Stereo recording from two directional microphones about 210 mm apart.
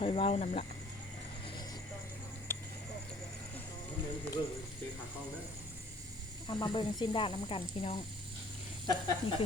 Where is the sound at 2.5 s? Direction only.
10° left (ahead or behind).